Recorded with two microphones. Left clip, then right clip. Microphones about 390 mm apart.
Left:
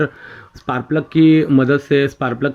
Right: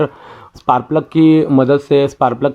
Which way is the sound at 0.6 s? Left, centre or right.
Centre.